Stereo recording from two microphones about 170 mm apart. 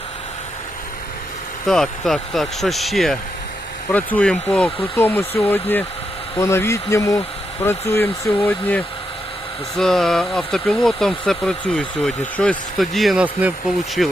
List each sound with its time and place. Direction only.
1.6 s speech: centre (ahead or behind)